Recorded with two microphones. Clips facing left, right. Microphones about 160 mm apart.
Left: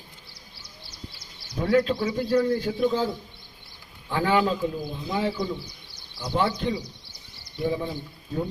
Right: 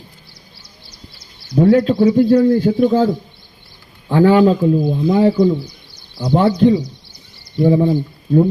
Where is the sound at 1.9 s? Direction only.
60° right (ahead or behind).